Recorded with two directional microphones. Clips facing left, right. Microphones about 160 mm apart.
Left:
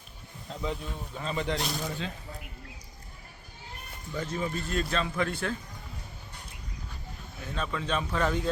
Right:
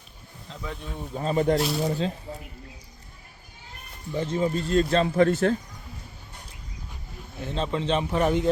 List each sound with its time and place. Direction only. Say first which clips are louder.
1.1 s speech: right 9 dB; 40° right (ahead or behind)
4.1 s speech: right 7 dB; 30° right (ahead or behind)
7.3 s speech: right 6 dB; 25° right (ahead or behind)